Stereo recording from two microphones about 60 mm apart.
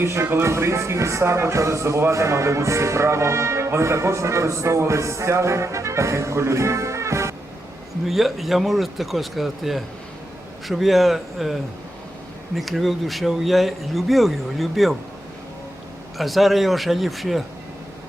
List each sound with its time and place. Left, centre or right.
0.0 s speech: right
8.0 s speech: centre
12.5 s speech: centre
16.1 s speech: centre